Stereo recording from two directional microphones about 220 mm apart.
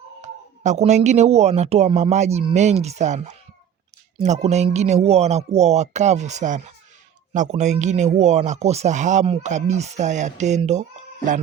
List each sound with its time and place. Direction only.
0.2 s speech: 35° right (ahead or behind)